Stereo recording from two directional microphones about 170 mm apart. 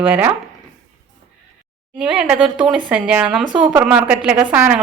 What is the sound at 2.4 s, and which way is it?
Speech, 30° right (ahead or behind).